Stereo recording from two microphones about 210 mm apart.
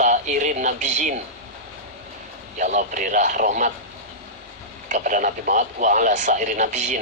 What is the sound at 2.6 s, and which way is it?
Speech, 35° right (ahead or behind).